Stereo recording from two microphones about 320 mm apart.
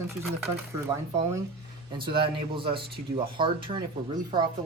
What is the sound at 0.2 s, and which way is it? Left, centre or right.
Speech, centre.